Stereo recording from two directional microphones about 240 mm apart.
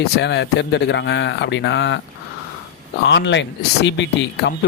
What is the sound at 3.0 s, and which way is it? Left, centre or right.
Speech, left.